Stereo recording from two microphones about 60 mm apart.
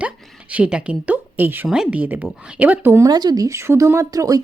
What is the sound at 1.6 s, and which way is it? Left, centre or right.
Speech, centre.